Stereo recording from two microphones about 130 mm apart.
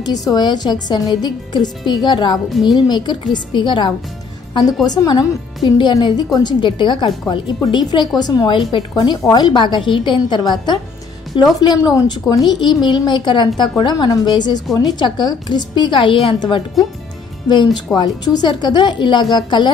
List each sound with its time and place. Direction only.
0.0 s a woman's voice: 30° left (ahead or behind)